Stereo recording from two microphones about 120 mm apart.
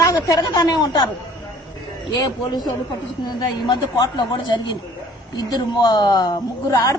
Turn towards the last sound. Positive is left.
turn(degrees=30)  # may be behind; listen again after turning